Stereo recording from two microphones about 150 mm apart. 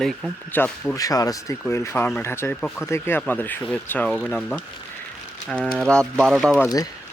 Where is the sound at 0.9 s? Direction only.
25° left (ahead or behind).